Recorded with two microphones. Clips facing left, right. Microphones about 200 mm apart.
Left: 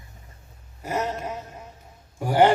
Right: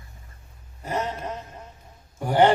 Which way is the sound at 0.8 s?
10° left (ahead or behind).